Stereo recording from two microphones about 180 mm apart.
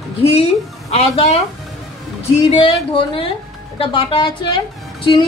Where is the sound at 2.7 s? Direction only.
30° left (ahead or behind).